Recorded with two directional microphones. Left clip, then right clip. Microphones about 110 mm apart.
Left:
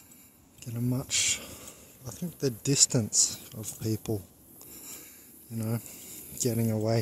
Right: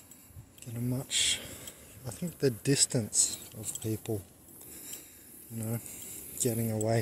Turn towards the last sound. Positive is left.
turn(degrees=35)  # may be behind; listen again after turning